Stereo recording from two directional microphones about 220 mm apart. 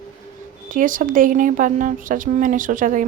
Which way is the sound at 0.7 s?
35° right (ahead or behind).